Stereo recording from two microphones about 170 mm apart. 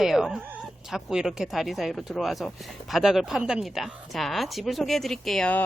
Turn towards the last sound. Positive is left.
turn(degrees=5)  # may be behind; listen again after turning